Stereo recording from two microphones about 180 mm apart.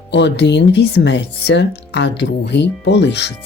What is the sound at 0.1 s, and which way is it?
Speech, 70° left (ahead or behind).